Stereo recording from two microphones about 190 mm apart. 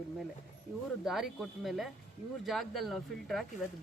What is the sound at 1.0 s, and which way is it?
Speech, centre (ahead or behind).